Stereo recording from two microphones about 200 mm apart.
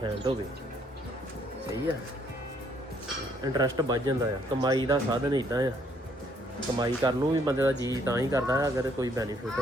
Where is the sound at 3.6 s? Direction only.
20° right (ahead or behind).